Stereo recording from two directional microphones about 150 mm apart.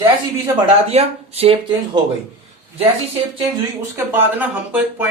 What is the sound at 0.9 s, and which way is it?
Speech, 45° right (ahead or behind).